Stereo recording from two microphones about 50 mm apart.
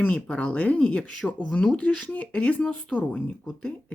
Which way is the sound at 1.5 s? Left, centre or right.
Left.